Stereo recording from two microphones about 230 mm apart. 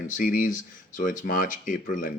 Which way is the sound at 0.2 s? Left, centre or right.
Left.